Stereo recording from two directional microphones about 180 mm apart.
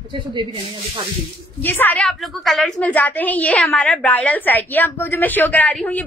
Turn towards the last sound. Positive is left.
turn(degrees=10)  # may be behind; listen again after turning